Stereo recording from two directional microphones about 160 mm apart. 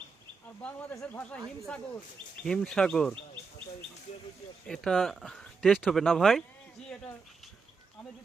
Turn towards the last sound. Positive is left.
turn(degrees=0)  # may be behind; listen again after turning